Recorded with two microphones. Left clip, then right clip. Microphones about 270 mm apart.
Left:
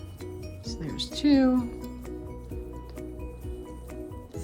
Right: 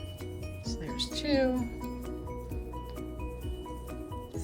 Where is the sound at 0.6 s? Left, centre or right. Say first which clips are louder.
Left 1 dB; left.